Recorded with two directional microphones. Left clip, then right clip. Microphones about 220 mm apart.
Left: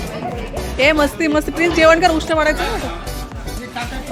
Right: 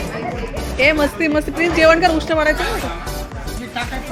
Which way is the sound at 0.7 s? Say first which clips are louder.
Left 1 dB; 15° left (ahead or behind).